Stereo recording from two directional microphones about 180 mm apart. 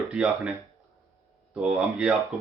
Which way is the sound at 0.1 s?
5° right (ahead or behind).